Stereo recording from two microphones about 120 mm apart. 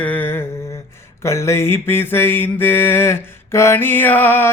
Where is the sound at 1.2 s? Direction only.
25° left (ahead or behind).